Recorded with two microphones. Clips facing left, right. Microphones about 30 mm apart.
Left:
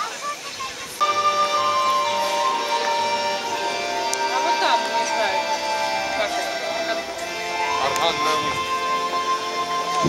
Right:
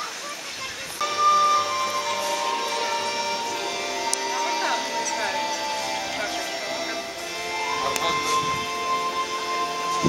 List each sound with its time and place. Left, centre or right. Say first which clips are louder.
1.0 s music: even; left
2.4 s music: left 4 dB; centre
2.7 s music: left 5 dB; left
3.6 s music: left 4 dB; left
4.6 s music: left 5 dB; left
7.5 s music: left 4 dB; left